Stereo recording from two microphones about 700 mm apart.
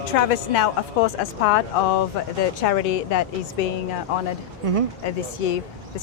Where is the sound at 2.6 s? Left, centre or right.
Left.